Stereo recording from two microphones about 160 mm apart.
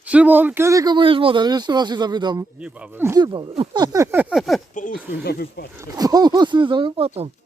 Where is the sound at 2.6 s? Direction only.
5° right (ahead or behind).